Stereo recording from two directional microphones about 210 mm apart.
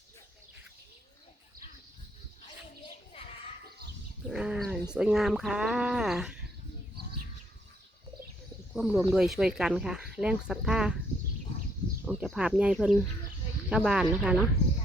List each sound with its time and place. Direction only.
2.8 s children playing: 25° left (ahead or behind)
4.3 s speech: 5° right (ahead or behind)
8.7 s speech: 5° right (ahead or behind)
12.0 s speech: 5° right (ahead or behind)